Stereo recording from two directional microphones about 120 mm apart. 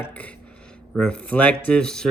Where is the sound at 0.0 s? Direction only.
10° left (ahead or behind).